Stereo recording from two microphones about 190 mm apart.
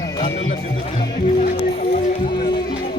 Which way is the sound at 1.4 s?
50° left (ahead or behind).